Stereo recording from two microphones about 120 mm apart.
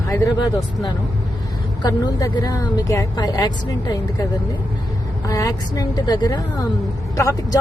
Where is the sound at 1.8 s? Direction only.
30° left (ahead or behind).